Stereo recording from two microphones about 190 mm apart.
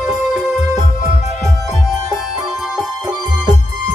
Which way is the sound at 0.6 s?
40° left (ahead or behind).